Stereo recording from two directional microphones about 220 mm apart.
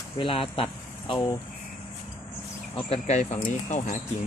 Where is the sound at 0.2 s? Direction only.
25° left (ahead or behind).